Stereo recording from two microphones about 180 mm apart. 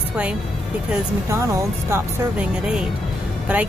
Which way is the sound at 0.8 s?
10° right (ahead or behind).